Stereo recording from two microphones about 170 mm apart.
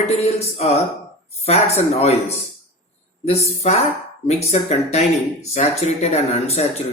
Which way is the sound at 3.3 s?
40° left (ahead or behind).